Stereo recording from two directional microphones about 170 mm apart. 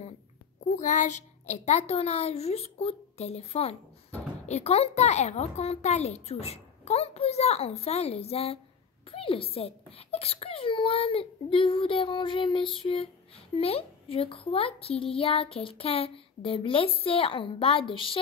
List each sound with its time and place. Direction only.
0.7 s a child's voice: 45° left (ahead or behind)